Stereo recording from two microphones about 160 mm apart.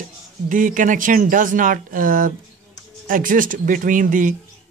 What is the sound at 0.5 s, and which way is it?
Speech, 55° right (ahead or behind).